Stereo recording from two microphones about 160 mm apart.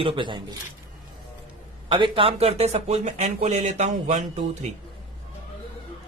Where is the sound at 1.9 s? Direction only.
30° right (ahead or behind).